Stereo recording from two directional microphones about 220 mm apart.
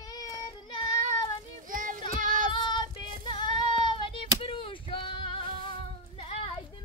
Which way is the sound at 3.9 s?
25° left (ahead or behind).